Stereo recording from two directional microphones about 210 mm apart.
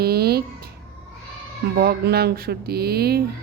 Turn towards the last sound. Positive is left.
turn(degrees=-50)  # may be behind; listen again after turning